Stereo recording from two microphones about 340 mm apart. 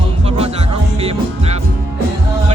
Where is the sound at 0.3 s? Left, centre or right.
Centre.